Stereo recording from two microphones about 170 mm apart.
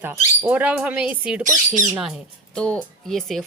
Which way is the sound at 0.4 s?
5° right (ahead or behind).